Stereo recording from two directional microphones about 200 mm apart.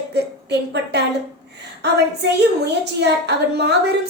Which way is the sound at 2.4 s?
60° right (ahead or behind).